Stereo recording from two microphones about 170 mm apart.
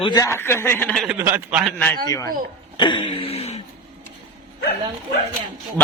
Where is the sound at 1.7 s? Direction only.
10° left (ahead or behind).